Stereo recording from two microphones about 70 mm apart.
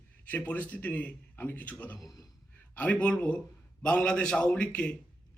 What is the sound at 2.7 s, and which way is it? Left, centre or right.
A man's voice, left.